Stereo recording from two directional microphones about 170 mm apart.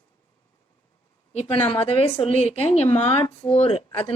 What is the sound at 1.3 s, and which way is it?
A woman's voice, 40° left (ahead or behind).